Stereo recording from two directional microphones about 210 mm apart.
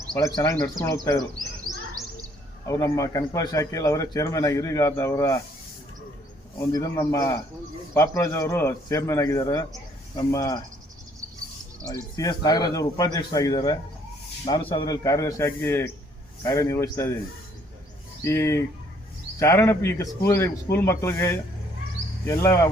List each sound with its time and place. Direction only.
0.2 s speech: 15° left (ahead or behind)
2.6 s speech: 15° left (ahead or behind)
6.6 s speech: 15° left (ahead or behind)
11.9 s speech: 15° left (ahead or behind)
18.2 s speech: 15° left (ahead or behind)